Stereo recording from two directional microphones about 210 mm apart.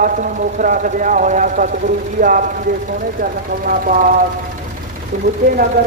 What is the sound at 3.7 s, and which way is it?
Speech, 40° right (ahead or behind).